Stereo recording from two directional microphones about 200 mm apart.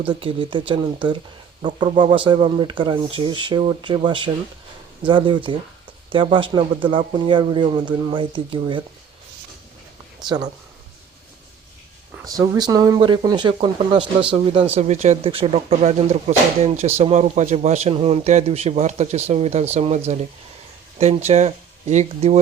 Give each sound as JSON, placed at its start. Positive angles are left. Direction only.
{"t": 0.1, "sound": "speech", "side_deg": -25}
{"t": 10.2, "sound": "speech", "side_deg": -20}
{"t": 12.4, "sound": "speech", "side_deg": -20}
{"t": 21.0, "sound": "speech", "side_deg": -30}